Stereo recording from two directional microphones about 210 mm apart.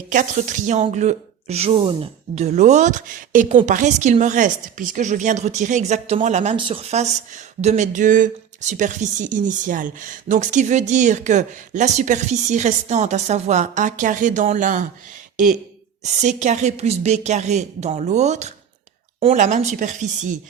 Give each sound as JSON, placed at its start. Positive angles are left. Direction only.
{"t": 0.1, "sound": "a woman's voice", "side_deg": -40}
{"t": 16.0, "sound": "a woman's voice", "side_deg": -35}